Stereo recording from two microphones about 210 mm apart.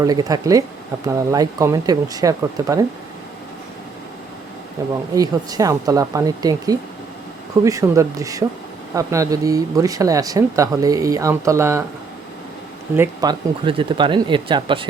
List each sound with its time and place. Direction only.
0.0 s speech: 20° right (ahead or behind)
4.8 s speech: 15° right (ahead or behind)
13.0 s speech: 20° right (ahead or behind)